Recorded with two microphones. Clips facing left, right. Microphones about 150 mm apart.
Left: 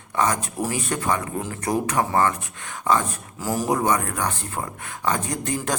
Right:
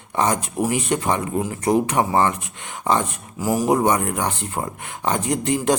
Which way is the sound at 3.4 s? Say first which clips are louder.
Right 4 dB; 15° right (ahead or behind).